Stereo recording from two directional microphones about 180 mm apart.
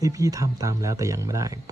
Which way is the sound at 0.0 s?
20° right (ahead or behind).